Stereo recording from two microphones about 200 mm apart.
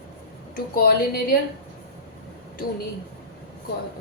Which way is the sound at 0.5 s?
45° left (ahead or behind).